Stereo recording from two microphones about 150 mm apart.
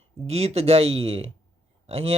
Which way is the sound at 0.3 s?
45° right (ahead or behind).